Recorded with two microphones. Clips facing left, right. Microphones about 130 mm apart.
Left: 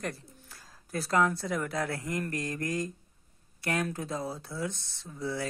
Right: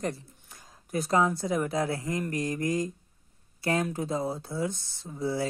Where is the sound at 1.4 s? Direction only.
25° right (ahead or behind).